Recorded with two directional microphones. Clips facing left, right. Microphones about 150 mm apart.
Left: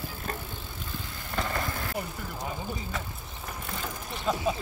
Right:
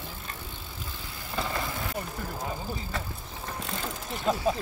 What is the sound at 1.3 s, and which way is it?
Vehicle, 5° right (ahead or behind).